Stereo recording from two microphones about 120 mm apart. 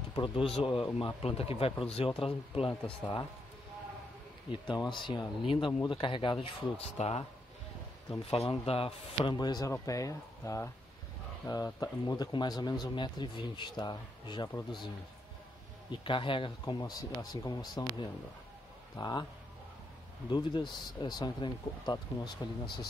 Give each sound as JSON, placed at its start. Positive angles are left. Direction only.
{"t": 0.1, "sound": "speech", "side_deg": 45}
{"t": 4.7, "sound": "speech", "side_deg": 40}
{"t": 8.3, "sound": "speech", "side_deg": 55}
{"t": 15.9, "sound": "speech", "side_deg": 45}
{"t": 18.9, "sound": "speech", "side_deg": 35}
{"t": 20.2, "sound": "speech", "side_deg": 40}